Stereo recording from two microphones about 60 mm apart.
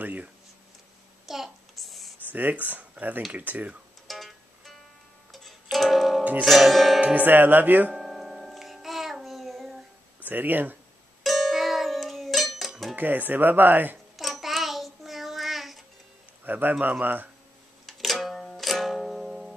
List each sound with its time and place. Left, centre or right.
0.0 s speech: right
1.2 s a sound: centre
2.2 s speech: right
4.1 s music: centre
6.4 s speech: centre
7.2 s speech: right
7.9 s music: centre
10.2 s speech: right
11.2 s music: centre
12.9 s speech: right
14.1 s child singing: centre
16.4 s a man's voice: right
17.8 s music: centre